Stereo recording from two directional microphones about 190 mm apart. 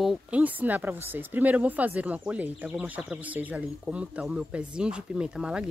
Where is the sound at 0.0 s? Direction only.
5° right (ahead or behind).